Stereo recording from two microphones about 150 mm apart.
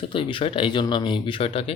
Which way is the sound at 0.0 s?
35° left (ahead or behind).